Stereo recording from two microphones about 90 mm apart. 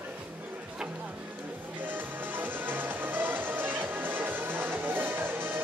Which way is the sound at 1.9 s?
20° right (ahead or behind).